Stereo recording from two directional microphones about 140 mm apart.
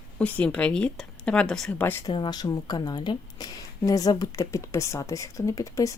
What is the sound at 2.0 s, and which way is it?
A woman's voice, 30° left (ahead or behind).